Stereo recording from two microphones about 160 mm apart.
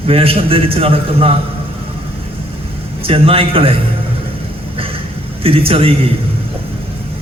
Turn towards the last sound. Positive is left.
turn(degrees=-35)  # may be behind; listen again after turning